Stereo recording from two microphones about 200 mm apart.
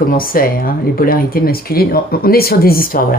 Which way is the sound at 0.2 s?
45° left (ahead or behind).